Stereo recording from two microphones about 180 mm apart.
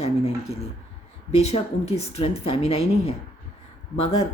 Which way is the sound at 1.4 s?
35° left (ahead or behind).